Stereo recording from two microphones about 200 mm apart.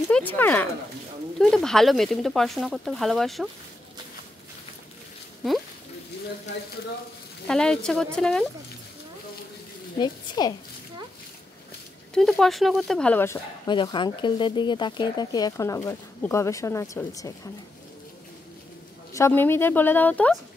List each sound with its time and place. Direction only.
0.1 s speech: 10° left (ahead or behind)
7.4 s speech: 5° left (ahead or behind)
9.9 s speech: 20° left (ahead or behind)
12.1 s speech: centre (ahead or behind)
13.7 s speech: 25° left (ahead or behind)
19.1 s speech: 10° left (ahead or behind)